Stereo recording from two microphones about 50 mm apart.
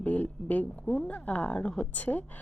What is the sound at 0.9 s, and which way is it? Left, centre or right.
Speech, centre.